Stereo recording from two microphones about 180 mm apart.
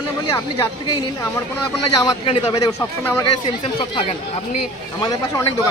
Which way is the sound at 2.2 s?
25° left (ahead or behind).